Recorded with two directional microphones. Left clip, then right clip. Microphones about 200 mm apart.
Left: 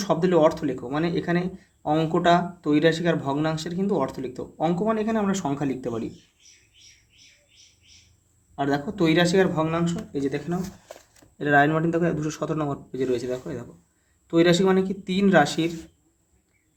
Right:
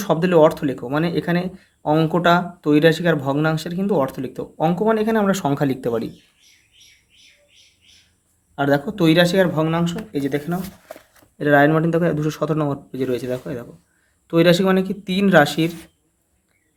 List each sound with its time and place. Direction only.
0.0 s speech: 30° right (ahead or behind)
8.5 s speech: 30° right (ahead or behind)